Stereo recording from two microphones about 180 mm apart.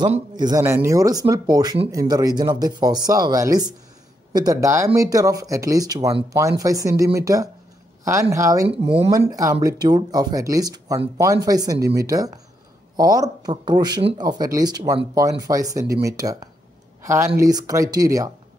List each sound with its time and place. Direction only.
0.4 s speech: 20° right (ahead or behind)
8.6 s speech: 30° right (ahead or behind)
9.1 s speech: 20° right (ahead or behind)